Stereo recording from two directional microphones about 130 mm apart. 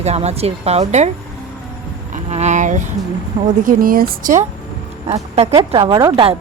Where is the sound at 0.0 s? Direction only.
55° right (ahead or behind).